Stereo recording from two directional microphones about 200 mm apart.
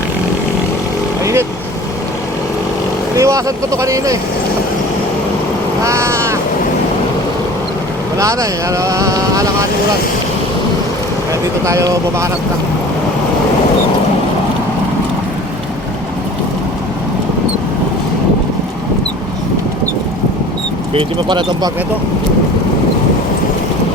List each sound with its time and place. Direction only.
1.2 s vehicle: 15° right (ahead or behind)
3.2 s speech: 15° right (ahead or behind)
5.8 s vehicle: 15° right (ahead or behind)
8.2 s speech: 15° right (ahead or behind)
11.6 s speech: 15° right (ahead or behind)
20.9 s speech: 20° right (ahead or behind)